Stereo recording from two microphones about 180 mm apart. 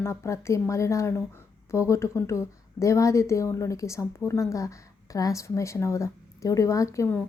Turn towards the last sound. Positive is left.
turn(degrees=15)  # may be behind; listen again after turning